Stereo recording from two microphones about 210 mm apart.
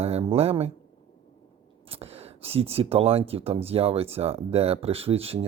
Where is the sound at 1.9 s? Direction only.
30° right (ahead or behind).